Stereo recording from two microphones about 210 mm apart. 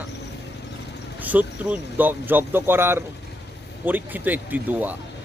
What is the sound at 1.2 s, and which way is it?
Speech, 10° right (ahead or behind).